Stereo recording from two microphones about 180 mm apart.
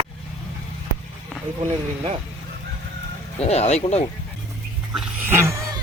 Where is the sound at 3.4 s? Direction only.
35° left (ahead or behind).